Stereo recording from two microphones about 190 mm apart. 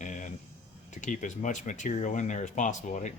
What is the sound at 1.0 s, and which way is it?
Speech, 40° left (ahead or behind).